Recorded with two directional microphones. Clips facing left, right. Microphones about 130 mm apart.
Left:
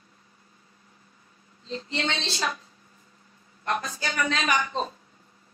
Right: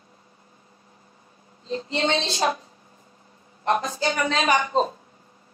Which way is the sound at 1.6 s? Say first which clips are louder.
Right 5 dB; 20° right (ahead or behind).